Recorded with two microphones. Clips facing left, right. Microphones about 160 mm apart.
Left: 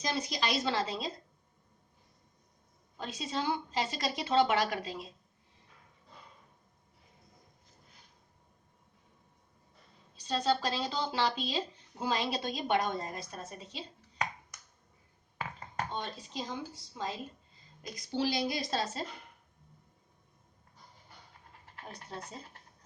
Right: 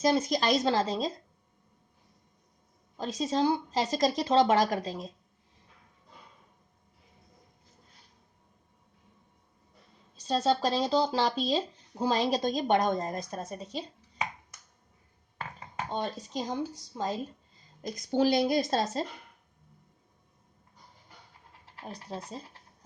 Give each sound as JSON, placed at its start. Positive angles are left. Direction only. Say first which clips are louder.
{"t": 0.0, "sound": "a woman's voice", "louder": "right 8 dB", "side_deg": -45}
{"t": 3.0, "sound": "speech", "louder": "right 8 dB", "side_deg": -40}
{"t": 10.2, "sound": "speech", "louder": "right 4 dB", "side_deg": -40}
{"t": 15.4, "sound": "a sound", "louder": "even", "side_deg": 0}
{"t": 15.9, "sound": "a woman's voice", "louder": "right 6 dB", "side_deg": -40}